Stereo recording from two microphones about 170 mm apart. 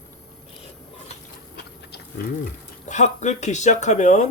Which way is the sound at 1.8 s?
75° left (ahead or behind).